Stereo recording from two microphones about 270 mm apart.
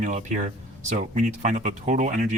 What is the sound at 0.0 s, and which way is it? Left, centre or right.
Speech, right.